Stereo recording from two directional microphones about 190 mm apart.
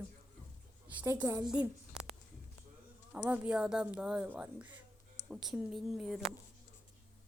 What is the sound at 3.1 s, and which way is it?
A woman's voice, 5° right (ahead or behind).